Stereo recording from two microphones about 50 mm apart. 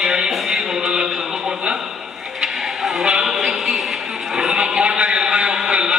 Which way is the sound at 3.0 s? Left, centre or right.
Centre.